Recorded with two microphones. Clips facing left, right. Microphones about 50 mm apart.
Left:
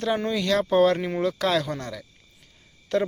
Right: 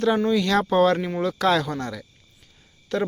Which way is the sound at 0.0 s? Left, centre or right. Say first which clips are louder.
Right 4 dB; centre.